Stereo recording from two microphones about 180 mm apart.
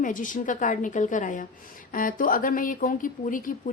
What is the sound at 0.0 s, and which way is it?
Speech, 45° left (ahead or behind).